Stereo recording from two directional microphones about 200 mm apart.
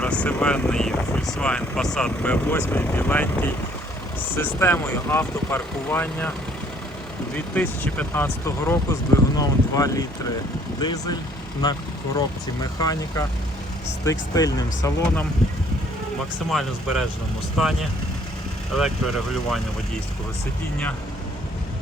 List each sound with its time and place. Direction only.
0.0 s speech: 5° left (ahead or behind)
7.3 s speech: 10° left (ahead or behind)
16.5 s speech: centre (ahead or behind)
18.8 s speech: centre (ahead or behind)